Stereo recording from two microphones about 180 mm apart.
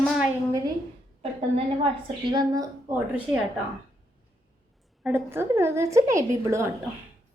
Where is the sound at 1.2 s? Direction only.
35° right (ahead or behind).